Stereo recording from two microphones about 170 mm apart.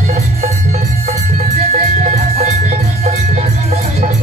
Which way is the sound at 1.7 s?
40° right (ahead or behind).